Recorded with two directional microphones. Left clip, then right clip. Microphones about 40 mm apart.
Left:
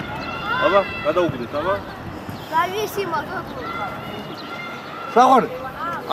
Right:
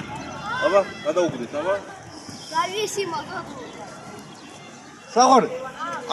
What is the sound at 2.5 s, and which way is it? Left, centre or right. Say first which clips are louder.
Speech: left 4 dB; right.